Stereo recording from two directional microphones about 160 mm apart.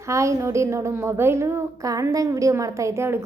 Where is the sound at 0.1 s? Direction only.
20° right (ahead or behind).